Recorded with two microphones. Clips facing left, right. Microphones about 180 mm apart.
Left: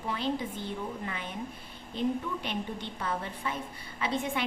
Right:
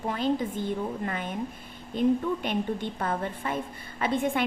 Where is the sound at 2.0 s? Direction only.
50° right (ahead or behind).